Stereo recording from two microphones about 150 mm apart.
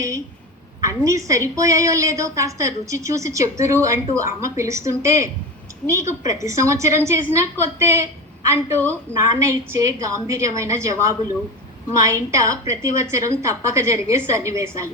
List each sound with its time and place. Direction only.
0.8 s a woman's voice: 20° right (ahead or behind)